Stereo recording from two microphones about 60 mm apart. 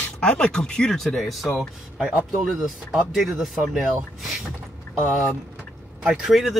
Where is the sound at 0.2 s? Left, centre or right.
Centre.